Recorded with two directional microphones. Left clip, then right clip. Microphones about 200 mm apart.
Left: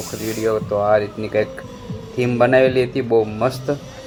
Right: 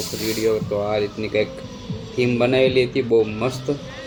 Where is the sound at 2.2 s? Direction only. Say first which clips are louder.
Left 4 dB; 5° left (ahead or behind).